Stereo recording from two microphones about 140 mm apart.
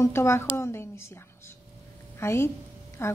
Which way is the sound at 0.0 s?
20° left (ahead or behind).